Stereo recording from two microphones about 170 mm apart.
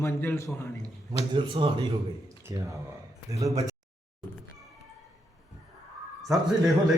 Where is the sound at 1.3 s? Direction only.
30° right (ahead or behind).